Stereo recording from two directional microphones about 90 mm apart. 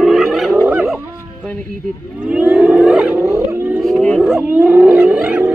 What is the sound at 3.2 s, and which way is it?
Wild animals, 30° right (ahead or behind).